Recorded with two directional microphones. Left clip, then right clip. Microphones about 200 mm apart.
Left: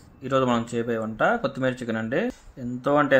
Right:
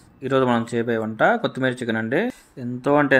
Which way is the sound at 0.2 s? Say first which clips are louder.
Right 3 dB; 20° right (ahead or behind).